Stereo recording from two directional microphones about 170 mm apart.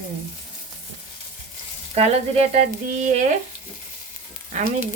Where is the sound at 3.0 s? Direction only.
45° right (ahead or behind).